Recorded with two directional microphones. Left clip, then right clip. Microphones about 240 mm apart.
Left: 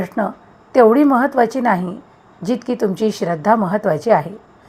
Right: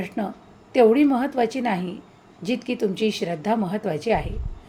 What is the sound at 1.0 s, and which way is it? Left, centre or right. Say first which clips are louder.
A woman's voice: left 7 dB; centre.